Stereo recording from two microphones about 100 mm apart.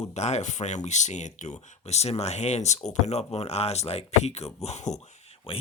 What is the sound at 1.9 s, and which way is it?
Speech, 90° left.